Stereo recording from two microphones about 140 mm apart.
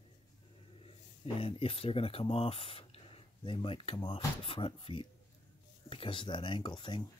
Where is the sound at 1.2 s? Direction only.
40° left (ahead or behind).